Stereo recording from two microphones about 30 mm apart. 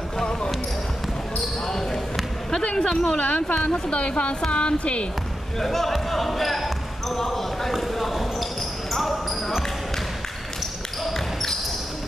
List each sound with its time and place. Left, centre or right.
1.7 s basketball bounce: centre
2.6 s a woman's voice: left
2.9 s speech: left
3.2 s speech: left
4.5 s a woman's voice: left
5.6 s speech: centre
7.7 s clip-clop: centre
8.9 s basketball bounce: centre